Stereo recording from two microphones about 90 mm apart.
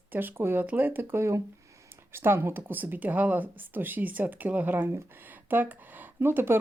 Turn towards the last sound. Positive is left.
turn(degrees=-25)  # may be behind; listen again after turning